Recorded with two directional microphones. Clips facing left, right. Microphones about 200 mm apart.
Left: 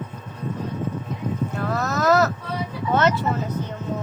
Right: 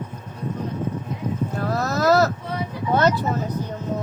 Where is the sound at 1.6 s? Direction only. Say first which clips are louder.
Right 1 dB; 35° right (ahead or behind).